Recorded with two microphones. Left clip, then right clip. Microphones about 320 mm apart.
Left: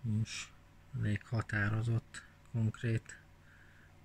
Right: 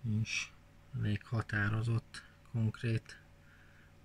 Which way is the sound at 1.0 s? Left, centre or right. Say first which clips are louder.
Even; centre.